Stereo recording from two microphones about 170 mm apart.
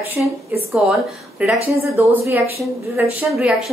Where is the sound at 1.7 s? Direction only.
15° right (ahead or behind).